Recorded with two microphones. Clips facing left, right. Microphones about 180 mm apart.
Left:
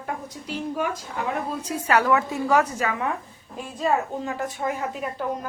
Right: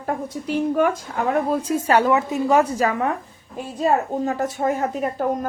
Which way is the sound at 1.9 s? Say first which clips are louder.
Right 2 dB; 25° right (ahead or behind).